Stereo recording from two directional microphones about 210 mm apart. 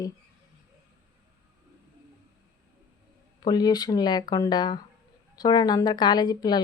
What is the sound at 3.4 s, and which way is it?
A woman's voice, 20° left (ahead or behind).